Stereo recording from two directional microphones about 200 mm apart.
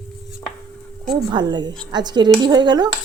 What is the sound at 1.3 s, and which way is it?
Speech, 20° right (ahead or behind).